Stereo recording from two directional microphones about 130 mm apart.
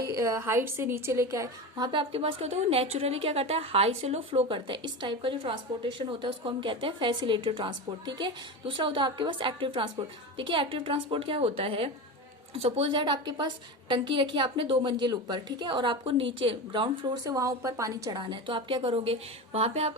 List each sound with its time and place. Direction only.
0.0 s a woman's voice: 25° right (ahead or behind)
1.9 s a woman's voice: 45° right (ahead or behind)
17.2 s a woman's voice: 25° right (ahead or behind); by 19.9 s 50° right (ahead or behind)